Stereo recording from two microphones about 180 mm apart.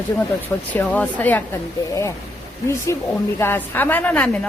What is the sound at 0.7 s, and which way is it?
Speech, 10° left (ahead or behind).